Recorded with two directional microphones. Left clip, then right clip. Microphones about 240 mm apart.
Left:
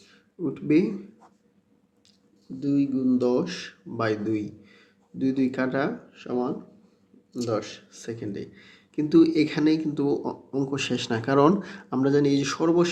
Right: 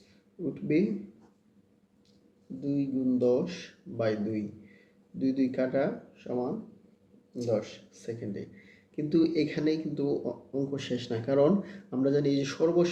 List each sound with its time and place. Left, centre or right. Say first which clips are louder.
0.5 s speech: left 6 dB; left
2.6 s speech: left 6 dB; left
7.4 s speech: left 2 dB; left